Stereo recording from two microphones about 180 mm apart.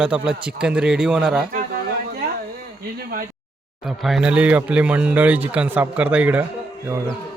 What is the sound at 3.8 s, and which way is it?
Speech, centre (ahead or behind).